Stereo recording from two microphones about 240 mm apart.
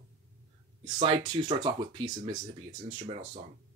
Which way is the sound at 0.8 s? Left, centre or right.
Right.